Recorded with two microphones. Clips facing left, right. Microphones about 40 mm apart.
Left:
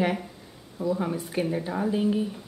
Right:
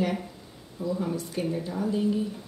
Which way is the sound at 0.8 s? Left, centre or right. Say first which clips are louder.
Left 3 dB; left.